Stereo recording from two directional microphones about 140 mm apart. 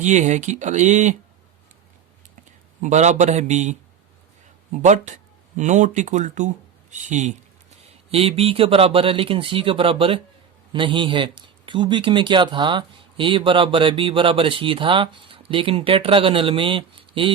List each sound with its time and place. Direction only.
0.0 s speech: 55° right (ahead or behind)
2.8 s speech: 55° right (ahead or behind)
7.8 s speech: 45° right (ahead or behind)